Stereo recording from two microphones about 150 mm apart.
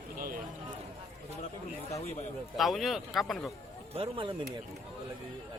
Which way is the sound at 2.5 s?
Centre (ahead or behind).